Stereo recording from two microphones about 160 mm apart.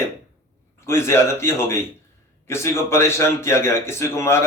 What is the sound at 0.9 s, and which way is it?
Speech, 15° left (ahead or behind).